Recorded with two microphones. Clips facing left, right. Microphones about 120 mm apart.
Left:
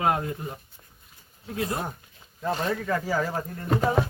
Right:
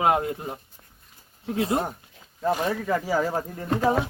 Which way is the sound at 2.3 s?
10° right (ahead or behind).